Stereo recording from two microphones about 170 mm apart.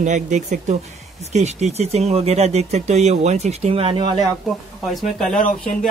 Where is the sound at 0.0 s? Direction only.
45° right (ahead or behind); by 4.3 s 30° right (ahead or behind).